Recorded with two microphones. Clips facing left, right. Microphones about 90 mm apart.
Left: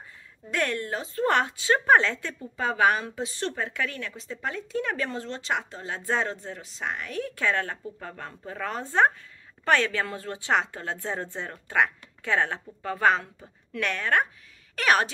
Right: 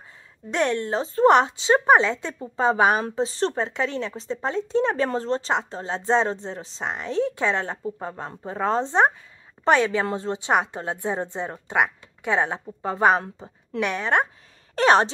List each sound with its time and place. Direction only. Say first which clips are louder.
0.5 s speech: right 5 dB; 25° right (ahead or behind)